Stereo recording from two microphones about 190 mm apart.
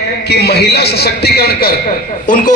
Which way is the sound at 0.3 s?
60° left (ahead or behind).